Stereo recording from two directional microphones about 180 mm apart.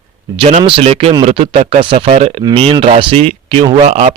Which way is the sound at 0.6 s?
30° right (ahead or behind).